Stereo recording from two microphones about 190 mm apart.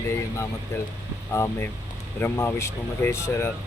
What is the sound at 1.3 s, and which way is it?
Speech, 15° left (ahead or behind).